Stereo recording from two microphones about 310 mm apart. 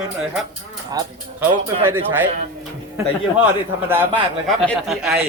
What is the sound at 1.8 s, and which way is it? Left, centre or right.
Speech, centre.